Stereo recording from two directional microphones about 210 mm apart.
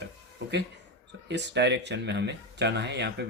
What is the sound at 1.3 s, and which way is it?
Speech, 55° right (ahead or behind).